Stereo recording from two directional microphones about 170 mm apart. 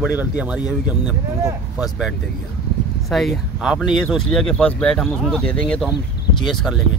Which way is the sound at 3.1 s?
Centre (ahead or behind).